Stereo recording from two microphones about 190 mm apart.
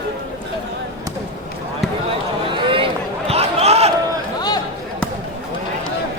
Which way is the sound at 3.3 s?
35° right (ahead or behind).